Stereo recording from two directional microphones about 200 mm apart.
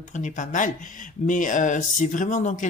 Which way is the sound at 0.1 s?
40° left (ahead or behind).